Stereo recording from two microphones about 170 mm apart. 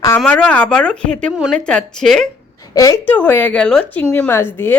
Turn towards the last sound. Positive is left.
turn(degrees=10)  # may be behind; listen again after turning